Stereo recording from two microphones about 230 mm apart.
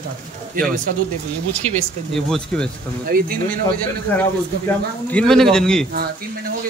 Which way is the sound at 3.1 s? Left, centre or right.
Right.